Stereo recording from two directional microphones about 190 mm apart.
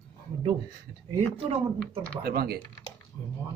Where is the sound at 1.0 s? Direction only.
30° right (ahead or behind).